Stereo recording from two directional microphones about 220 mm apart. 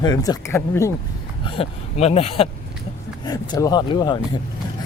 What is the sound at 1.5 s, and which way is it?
Speech, 25° left (ahead or behind).